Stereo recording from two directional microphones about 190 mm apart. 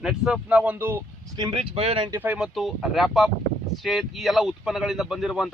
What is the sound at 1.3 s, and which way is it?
Speech, 25° right (ahead or behind).